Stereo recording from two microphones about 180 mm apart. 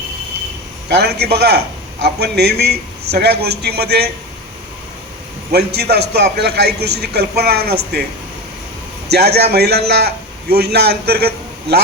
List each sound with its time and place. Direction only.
0.9 s a man's voice: 70° right (ahead or behind)
5.5 s a man's voice: 65° right (ahead or behind)
9.0 s a man's voice: 65° right (ahead or behind)